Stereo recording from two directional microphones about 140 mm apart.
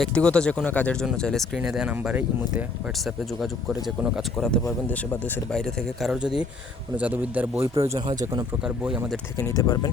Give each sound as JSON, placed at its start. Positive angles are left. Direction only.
{"t": 0.0, "sound": "speech", "side_deg": 10}
{"t": 8.6, "sound": "speech", "side_deg": -5}
{"t": 9.4, "sound": "speech", "side_deg": 25}